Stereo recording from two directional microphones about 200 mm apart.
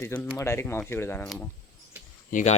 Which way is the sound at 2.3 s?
35° left (ahead or behind).